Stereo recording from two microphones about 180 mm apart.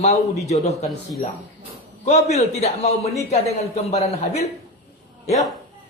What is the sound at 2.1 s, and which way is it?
A man's voice, 40° left (ahead or behind).